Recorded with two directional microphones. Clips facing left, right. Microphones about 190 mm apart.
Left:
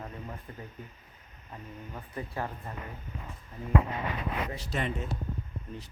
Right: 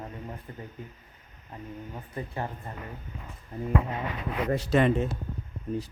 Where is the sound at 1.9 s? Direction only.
20° right (ahead or behind).